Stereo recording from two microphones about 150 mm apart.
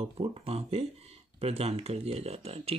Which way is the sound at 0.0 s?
40° right (ahead or behind).